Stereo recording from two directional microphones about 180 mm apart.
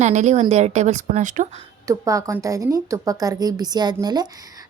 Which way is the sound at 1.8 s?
20° right (ahead or behind).